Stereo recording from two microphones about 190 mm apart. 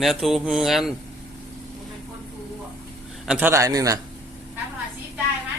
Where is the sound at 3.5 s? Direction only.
15° right (ahead or behind).